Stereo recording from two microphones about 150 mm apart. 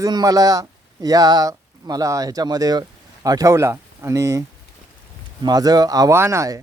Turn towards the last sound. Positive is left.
turn(degrees=-20)  # may be behind; listen again after turning